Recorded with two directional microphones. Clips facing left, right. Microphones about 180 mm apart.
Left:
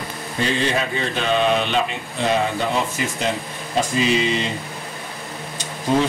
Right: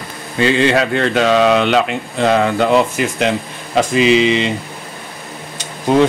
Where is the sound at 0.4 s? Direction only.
90° right.